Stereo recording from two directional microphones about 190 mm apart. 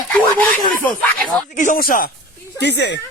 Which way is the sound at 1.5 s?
40° left (ahead or behind).